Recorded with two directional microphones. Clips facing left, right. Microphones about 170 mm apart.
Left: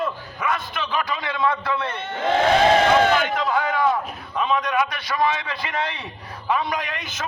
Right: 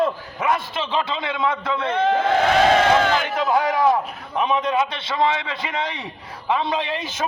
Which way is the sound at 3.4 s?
25° right (ahead or behind).